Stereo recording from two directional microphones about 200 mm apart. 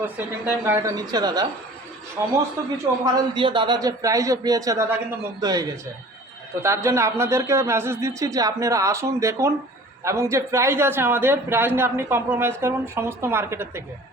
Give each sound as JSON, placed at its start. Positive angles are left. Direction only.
{"t": 0.0, "sound": "speech", "side_deg": -10}
{"t": 3.0, "sound": "a man's voice", "side_deg": -25}